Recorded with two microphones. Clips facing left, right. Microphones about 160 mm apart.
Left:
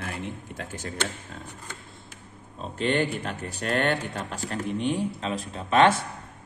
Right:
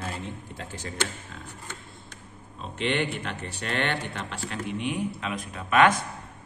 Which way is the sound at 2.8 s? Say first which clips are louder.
Left 2 dB; 40° left (ahead or behind).